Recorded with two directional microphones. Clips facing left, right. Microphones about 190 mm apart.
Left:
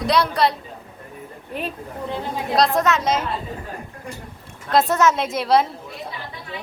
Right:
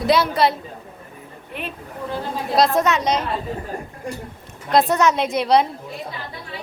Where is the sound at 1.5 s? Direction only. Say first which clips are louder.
Left 3 dB; 40° left (ahead or behind).